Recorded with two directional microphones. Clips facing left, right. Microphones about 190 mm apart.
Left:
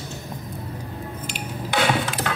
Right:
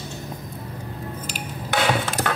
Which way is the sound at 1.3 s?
45° right (ahead or behind).